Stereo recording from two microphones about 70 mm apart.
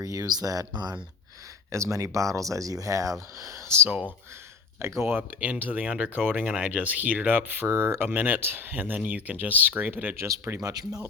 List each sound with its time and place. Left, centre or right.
0.0 s speech: right
1.7 s speech: right
4.8 s speech: right
5.1 s speech: right
10.2 s speech: right